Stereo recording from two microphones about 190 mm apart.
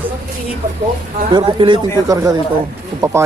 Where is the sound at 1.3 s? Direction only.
25° right (ahead or behind).